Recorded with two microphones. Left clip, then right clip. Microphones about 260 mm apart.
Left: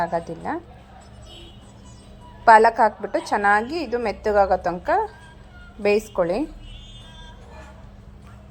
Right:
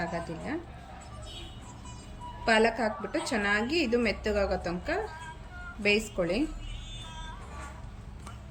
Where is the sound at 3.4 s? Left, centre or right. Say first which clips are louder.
Left 8 dB; centre.